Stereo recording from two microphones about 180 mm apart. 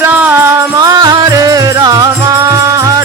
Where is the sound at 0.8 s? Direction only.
20° right (ahead or behind).